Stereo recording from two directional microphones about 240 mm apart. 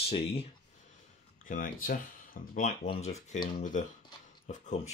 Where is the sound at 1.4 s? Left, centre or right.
Left.